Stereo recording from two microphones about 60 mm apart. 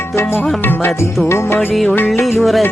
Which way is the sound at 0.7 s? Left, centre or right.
Left.